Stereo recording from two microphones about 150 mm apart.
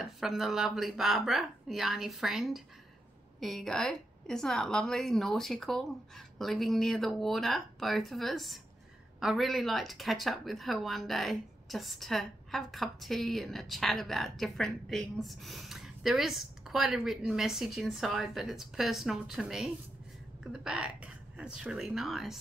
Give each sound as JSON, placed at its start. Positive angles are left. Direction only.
{"t": 0.0, "sound": "speech", "side_deg": 0}